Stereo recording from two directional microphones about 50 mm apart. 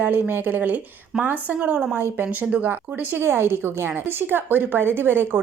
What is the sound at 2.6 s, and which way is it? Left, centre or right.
Speech, right.